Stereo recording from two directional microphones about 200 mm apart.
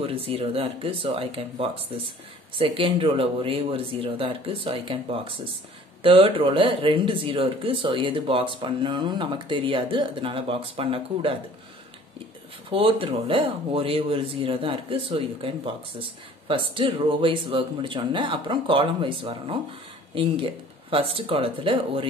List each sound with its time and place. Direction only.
0.0 s speech: 30° right (ahead or behind)
12.6 s speech: 25° right (ahead or behind)